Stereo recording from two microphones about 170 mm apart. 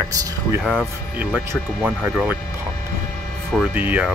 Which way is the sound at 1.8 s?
10° right (ahead or behind).